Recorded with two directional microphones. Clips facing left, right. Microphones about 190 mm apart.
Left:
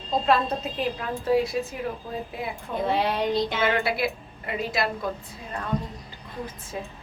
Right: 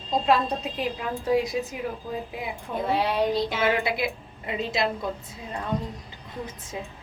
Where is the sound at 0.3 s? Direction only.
10° right (ahead or behind).